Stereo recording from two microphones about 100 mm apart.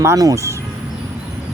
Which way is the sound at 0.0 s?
30° right (ahead or behind).